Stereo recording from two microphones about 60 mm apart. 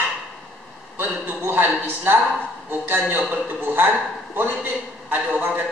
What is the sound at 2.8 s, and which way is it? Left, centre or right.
Speech, right.